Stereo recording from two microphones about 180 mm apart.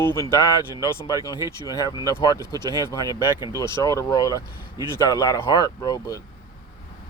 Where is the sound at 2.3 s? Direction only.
25° right (ahead or behind).